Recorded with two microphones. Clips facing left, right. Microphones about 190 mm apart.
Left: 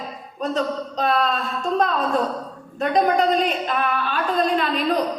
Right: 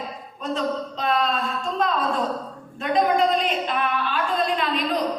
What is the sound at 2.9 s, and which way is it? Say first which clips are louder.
Speech: left 1 dB; 40° left (ahead or behind).